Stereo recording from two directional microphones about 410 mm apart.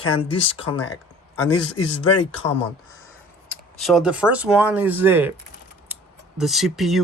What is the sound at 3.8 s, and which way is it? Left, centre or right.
Speech, centre.